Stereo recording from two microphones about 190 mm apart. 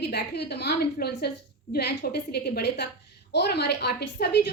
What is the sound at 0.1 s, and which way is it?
A woman's voice, 60° left (ahead or behind).